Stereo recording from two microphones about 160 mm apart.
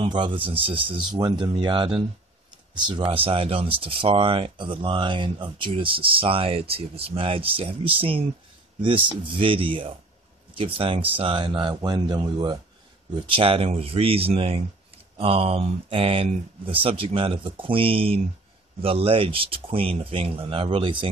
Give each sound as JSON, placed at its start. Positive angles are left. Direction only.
{"t": 0.0, "sound": "speech", "side_deg": -30}